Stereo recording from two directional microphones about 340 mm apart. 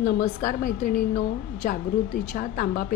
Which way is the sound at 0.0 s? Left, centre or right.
Left.